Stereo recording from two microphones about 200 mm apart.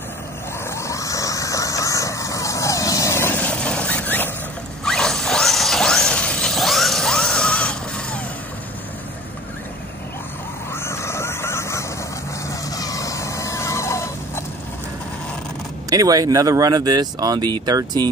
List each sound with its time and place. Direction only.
0.7 s vehicle: 15° left (ahead or behind)
4.8 s mechanisms: 5° left (ahead or behind)
10.7 s vehicle: 10° left (ahead or behind)
15.9 s speech: 20° right (ahead or behind)